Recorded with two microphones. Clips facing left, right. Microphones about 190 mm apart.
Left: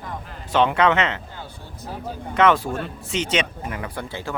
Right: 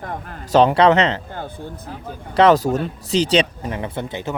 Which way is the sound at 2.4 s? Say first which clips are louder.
Right 5 dB; 40° right (ahead or behind).